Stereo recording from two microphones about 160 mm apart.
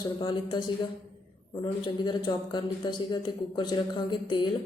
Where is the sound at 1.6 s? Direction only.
25° left (ahead or behind).